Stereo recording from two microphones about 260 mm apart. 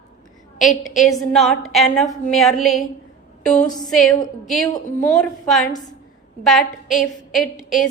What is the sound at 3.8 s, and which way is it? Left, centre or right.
A woman's voice, centre.